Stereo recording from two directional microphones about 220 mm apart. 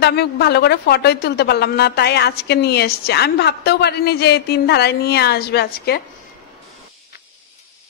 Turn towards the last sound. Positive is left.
turn(degrees=45)  # may be behind; listen again after turning